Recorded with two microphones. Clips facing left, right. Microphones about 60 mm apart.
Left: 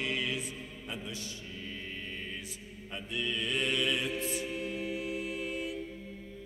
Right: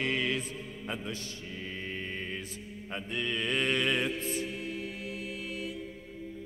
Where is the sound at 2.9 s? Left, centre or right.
Right.